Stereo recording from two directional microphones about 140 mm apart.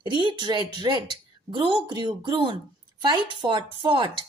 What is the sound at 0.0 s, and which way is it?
A woman's voice, 35° right (ahead or behind).